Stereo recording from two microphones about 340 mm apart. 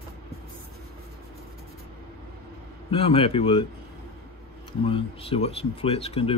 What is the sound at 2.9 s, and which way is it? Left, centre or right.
Speech, centre.